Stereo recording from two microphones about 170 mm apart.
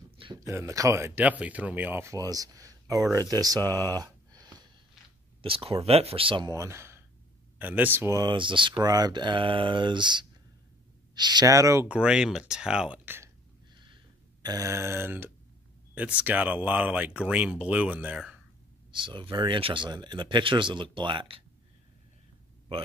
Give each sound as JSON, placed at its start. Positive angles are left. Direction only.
{"t": 0.4, "sound": "speech", "side_deg": -15}
{"t": 4.0, "sound": "a sound", "side_deg": -25}
{"t": 5.4, "sound": "speech", "side_deg": -30}
{"t": 6.5, "sound": "speech", "side_deg": -15}
{"t": 14.4, "sound": "speech", "side_deg": -20}
{"t": 18.9, "sound": "speech", "side_deg": -30}